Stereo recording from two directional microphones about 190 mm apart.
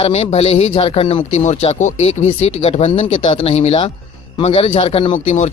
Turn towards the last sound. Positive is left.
turn(degrees=40)  # may be behind; listen again after turning